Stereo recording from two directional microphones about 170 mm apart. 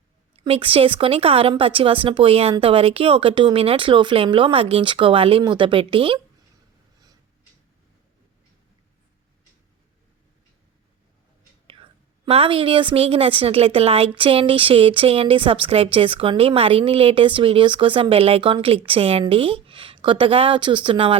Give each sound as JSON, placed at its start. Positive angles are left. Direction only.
{"t": 0.3, "sound": "a woman's voice", "side_deg": -35}
{"t": 11.7, "sound": "a woman's voice", "side_deg": -30}